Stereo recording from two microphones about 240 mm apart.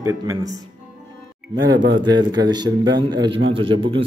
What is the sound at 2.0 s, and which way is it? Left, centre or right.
A man's voice, centre.